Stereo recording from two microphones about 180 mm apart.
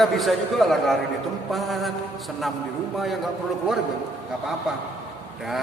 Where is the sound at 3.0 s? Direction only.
Centre (ahead or behind).